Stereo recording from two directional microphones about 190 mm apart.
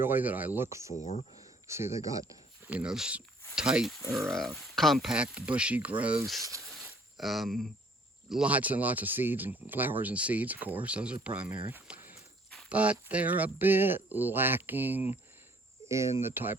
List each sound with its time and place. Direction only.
0.0 s speech: 10° right (ahead or behind)
0.9 s speech: 40° left (ahead or behind)
1.6 s speech: 15° right (ahead or behind)
2.6 s speech: 5° right (ahead or behind)